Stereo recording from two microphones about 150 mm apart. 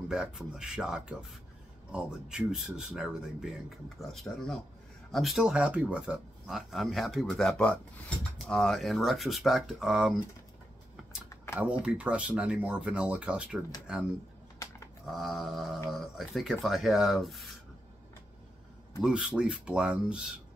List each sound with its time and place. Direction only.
0.1 s speech: 5° right (ahead or behind)
11.2 s typing: 15° left (ahead or behind)
11.8 s speech: 10° right (ahead or behind)
15.0 s speech: centre (ahead or behind)
19.0 s speech: 5° right (ahead or behind)